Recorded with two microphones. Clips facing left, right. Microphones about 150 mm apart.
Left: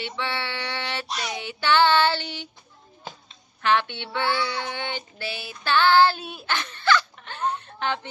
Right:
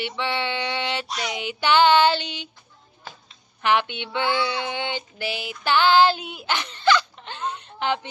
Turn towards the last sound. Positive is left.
turn(degrees=-15)  # may be behind; listen again after turning